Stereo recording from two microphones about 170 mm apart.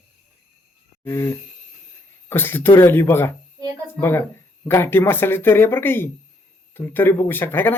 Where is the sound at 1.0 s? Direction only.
15° left (ahead or behind).